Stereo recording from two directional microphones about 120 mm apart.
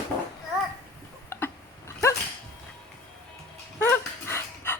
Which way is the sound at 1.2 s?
20° left (ahead or behind).